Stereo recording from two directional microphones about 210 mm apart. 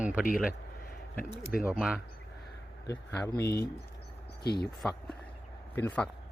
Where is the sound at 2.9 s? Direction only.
15° left (ahead or behind).